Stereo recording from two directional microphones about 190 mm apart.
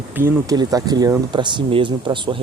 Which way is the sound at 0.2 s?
15° right (ahead or behind).